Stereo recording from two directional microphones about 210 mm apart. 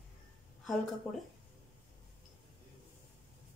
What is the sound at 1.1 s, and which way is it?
Speech, centre (ahead or behind).